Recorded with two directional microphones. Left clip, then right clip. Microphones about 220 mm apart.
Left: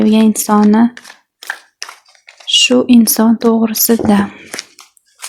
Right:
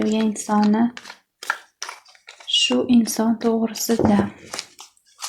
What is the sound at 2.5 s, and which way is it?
Speech, 50° left (ahead or behind).